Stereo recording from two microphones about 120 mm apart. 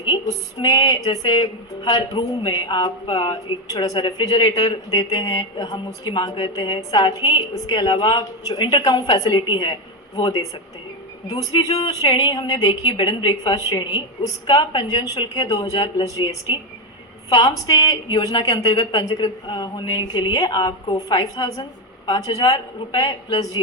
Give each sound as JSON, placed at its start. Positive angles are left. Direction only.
{"t": 0.6, "sound": "speech", "side_deg": 35}